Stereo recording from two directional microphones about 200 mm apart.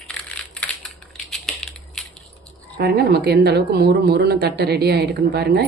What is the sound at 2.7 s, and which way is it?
A woman's voice, 50° right (ahead or behind).